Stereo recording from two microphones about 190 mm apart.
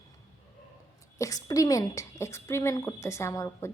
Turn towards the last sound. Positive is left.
turn(degrees=15)  # may be behind; listen again after turning